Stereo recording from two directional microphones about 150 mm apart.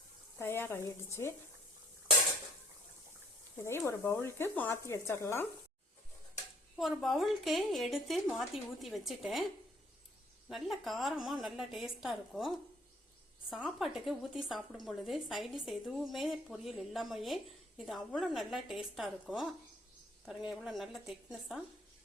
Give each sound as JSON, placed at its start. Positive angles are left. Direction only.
{"t": 0.3, "sound": "speech", "side_deg": 15}
{"t": 3.6, "sound": "speech", "side_deg": 15}
{"t": 7.0, "sound": "a woman's voice", "side_deg": 0}
{"t": 10.5, "sound": "a woman's voice", "side_deg": 0}
{"t": 13.5, "sound": "a woman's voice", "side_deg": 0}